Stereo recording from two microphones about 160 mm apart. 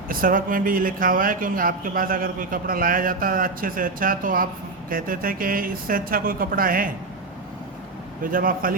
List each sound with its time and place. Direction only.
0.1 s speech: 60° right (ahead or behind)
8.2 s speech: 60° right (ahead or behind)